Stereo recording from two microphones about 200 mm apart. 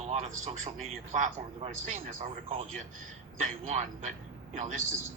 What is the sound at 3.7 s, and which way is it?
Speech, 35° right (ahead or behind).